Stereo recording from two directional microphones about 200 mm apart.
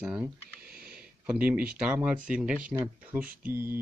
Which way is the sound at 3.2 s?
45° right (ahead or behind).